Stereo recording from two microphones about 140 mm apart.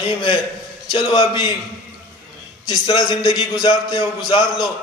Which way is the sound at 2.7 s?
30° left (ahead or behind).